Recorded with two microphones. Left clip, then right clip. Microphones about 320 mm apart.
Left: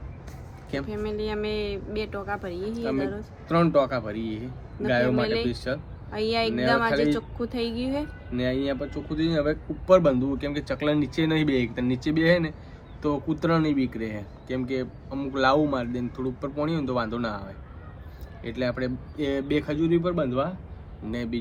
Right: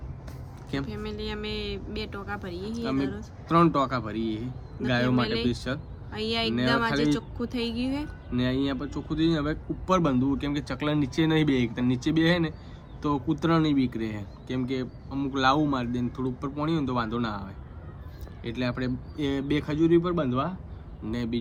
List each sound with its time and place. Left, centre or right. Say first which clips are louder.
0.7 s speech: left 4 dB; centre